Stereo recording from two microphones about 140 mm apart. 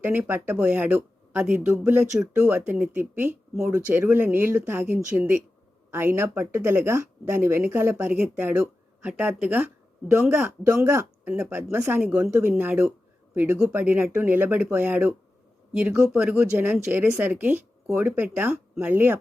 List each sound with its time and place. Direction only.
0.0 s a man's voice: 15° right (ahead or behind)